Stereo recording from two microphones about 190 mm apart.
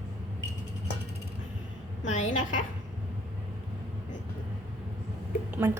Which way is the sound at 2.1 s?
40° left (ahead or behind).